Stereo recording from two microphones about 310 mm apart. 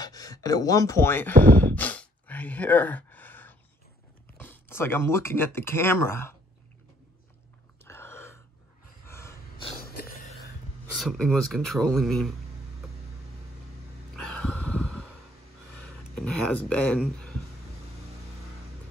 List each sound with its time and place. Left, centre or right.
0.0 s speech: centre
1.5 s sigh: centre
4.4 s speech: centre
7.8 s a sound: centre
9.0 s gasp: centre
9.8 s a sound: left
11.0 s speech: centre
14.1 s a sound: centre
16.2 s speech: centre